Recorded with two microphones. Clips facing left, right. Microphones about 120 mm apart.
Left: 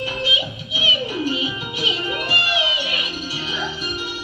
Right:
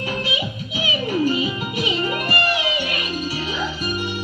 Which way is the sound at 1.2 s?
45° right (ahead or behind).